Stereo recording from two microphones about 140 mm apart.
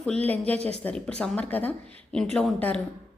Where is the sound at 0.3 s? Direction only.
10° left (ahead or behind).